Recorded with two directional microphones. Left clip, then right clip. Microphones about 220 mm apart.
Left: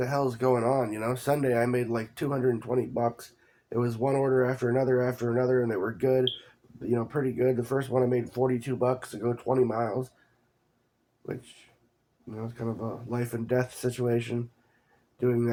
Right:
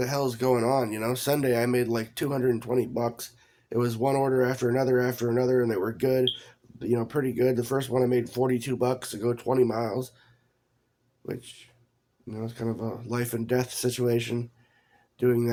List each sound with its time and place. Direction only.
0.0 s speech: 50° right (ahead or behind)
12.3 s speech: 55° right (ahead or behind)